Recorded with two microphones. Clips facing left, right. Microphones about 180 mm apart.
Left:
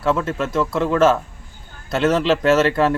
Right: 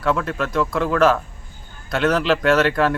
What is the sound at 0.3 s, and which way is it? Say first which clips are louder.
Speech: left 1 dB; centre (ahead or behind).